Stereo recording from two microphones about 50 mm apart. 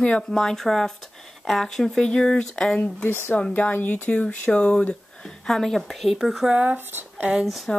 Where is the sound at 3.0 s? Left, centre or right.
Left.